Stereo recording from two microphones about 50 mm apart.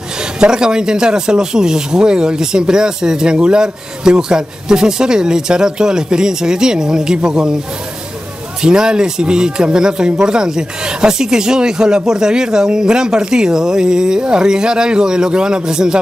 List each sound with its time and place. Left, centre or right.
0.4 s speech: centre
8.6 s speech: centre